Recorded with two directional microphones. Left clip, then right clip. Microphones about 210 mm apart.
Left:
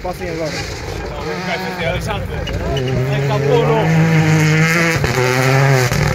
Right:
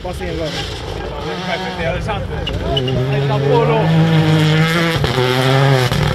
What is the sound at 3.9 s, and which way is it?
Vehicle, 5° left (ahead or behind).